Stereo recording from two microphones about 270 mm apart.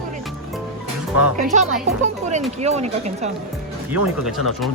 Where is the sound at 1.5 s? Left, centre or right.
Right.